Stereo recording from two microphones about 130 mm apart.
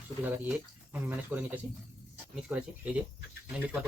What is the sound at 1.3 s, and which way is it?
Speech, 10° right (ahead or behind).